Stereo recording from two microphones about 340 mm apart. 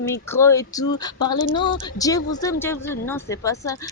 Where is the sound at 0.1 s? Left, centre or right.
Centre.